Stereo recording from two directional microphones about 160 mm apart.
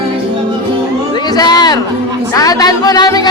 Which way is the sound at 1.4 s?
25° left (ahead or behind).